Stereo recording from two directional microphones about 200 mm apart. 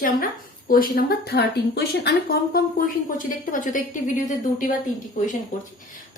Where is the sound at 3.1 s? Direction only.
40° left (ahead or behind).